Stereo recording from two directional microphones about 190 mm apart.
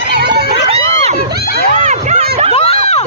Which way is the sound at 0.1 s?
60° right (ahead or behind).